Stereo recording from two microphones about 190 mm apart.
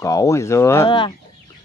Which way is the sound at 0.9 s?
25° left (ahead or behind).